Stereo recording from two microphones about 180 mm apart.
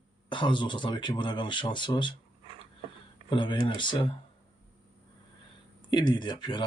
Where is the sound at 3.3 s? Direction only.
25° left (ahead or behind).